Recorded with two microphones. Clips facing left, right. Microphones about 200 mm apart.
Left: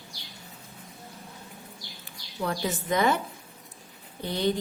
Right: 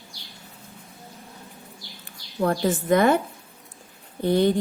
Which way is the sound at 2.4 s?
50° right (ahead or behind).